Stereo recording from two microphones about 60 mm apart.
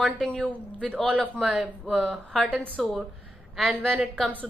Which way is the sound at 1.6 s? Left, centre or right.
Centre.